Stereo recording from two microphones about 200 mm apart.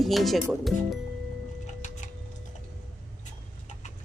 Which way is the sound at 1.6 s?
40° left (ahead or behind).